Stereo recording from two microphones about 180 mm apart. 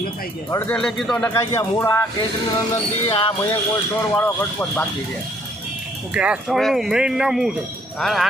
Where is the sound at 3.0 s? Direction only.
30° left (ahead or behind).